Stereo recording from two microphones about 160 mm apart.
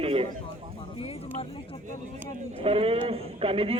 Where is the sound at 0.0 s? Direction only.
35° right (ahead or behind).